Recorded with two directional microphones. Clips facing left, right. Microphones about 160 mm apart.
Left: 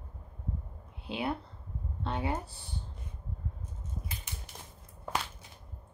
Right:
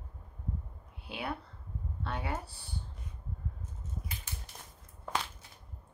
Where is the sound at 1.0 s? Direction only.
25° left (ahead or behind).